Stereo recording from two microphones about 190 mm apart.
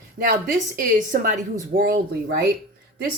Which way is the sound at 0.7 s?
45° right (ahead or behind).